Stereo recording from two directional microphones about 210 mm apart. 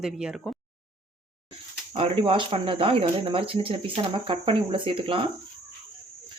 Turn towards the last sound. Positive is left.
turn(degrees=-25)  # may be behind; listen again after turning